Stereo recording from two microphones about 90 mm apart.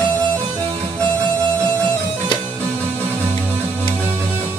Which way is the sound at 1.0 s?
15° left (ahead or behind).